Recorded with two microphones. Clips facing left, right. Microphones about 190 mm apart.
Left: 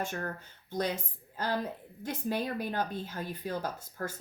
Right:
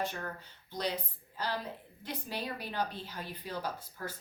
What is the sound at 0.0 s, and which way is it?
Speech, 45° left (ahead or behind).